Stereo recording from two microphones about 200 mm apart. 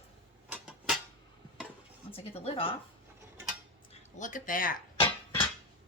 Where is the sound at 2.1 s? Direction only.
30° left (ahead or behind).